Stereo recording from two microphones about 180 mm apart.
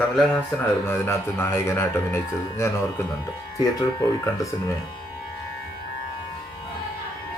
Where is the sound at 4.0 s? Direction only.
15° left (ahead or behind).